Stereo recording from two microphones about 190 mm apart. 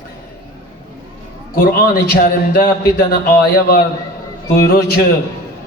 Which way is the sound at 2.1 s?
55° left (ahead or behind).